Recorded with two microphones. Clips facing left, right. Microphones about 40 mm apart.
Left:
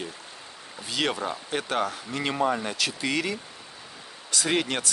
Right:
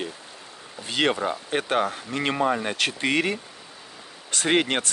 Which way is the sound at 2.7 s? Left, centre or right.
Right.